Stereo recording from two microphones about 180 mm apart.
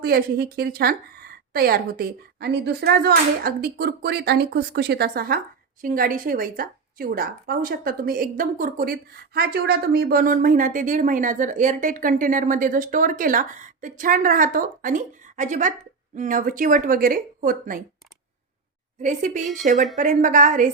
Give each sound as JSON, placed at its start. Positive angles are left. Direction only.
{"t": 0.0, "sound": "a woman's voice", "side_deg": -55}
{"t": 19.0, "sound": "a woman's voice", "side_deg": -45}